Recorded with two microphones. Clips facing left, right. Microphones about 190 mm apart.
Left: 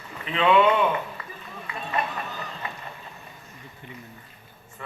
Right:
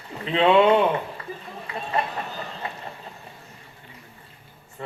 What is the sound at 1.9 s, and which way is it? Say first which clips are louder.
Vehicle: right 2 dB; 30° right (ahead or behind).